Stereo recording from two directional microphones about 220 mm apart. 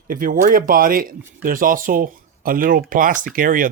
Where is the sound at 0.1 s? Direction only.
40° right (ahead or behind).